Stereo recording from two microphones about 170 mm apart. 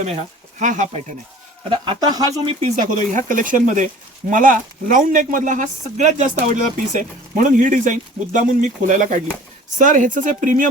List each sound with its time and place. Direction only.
0.6 s speech: 45° right (ahead or behind)
1.7 s speech: 30° right (ahead or behind); by 10.7 s 50° right (ahead or behind)